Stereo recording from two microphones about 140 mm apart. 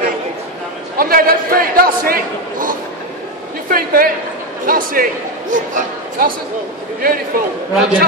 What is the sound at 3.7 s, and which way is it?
A man's voice, 90° right.